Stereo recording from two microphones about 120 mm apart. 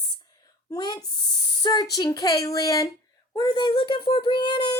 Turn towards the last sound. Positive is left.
turn(degrees=40)  # may be behind; listen again after turning